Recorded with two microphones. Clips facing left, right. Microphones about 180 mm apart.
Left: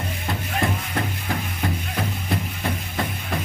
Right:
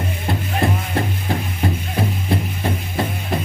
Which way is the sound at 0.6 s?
30° right (ahead or behind).